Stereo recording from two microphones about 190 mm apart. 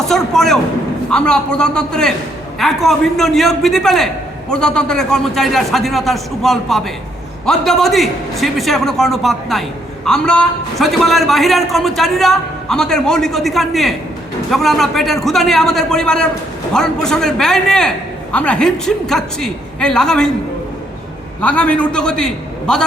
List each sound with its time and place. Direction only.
0.0 s a sound: centre (ahead or behind)
1.1 s a man's voice: 5° left (ahead or behind)
21.4 s a man's voice: 5° left (ahead or behind)